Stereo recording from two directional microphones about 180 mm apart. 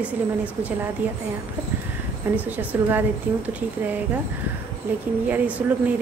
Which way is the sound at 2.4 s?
10° right (ahead or behind).